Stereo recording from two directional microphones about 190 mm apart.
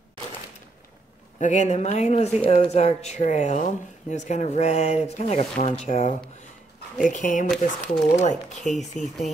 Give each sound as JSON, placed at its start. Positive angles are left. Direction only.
{"t": 1.4, "sound": "speech", "side_deg": 40}
{"t": 7.4, "sound": "speech", "side_deg": 0}
{"t": 8.2, "sound": "speech", "side_deg": 40}